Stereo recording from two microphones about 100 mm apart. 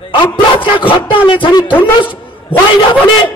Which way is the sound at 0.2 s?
60° left (ahead or behind).